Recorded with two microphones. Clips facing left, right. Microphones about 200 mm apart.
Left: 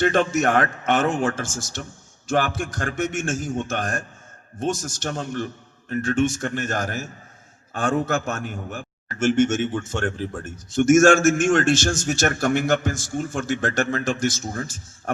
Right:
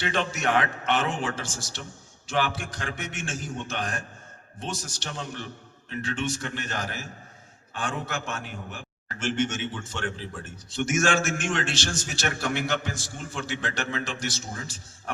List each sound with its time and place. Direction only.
0.0 s a man's voice: 45° left (ahead or behind)